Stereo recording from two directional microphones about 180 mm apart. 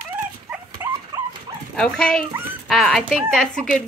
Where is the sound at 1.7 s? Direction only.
5° left (ahead or behind).